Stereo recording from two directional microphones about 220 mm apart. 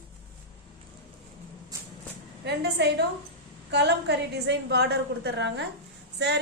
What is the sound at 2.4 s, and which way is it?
A woman's voice, 50° right (ahead or behind).